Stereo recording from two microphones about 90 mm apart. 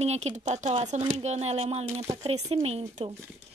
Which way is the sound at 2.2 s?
90° right.